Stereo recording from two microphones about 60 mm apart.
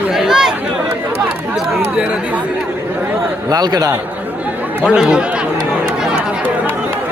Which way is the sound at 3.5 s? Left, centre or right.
Right.